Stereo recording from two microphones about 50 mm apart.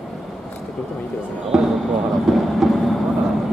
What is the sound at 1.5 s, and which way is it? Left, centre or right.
Speech, centre.